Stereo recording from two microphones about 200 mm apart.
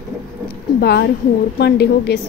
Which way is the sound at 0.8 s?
55° left (ahead or behind).